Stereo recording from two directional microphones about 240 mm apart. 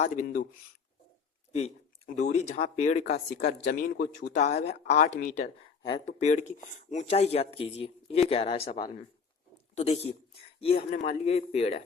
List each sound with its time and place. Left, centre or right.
0.0 s speech: left
2.1 s speech: left